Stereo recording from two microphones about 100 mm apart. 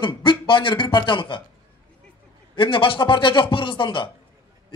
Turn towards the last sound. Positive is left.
turn(degrees=55)  # may be behind; listen again after turning